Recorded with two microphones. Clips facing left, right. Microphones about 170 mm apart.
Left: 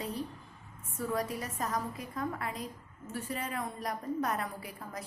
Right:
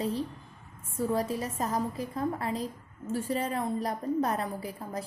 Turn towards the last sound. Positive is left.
turn(degrees=-30)  # may be behind; listen again after turning